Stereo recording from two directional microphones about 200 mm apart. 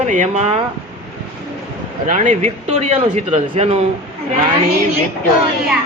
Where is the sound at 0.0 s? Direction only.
35° right (ahead or behind).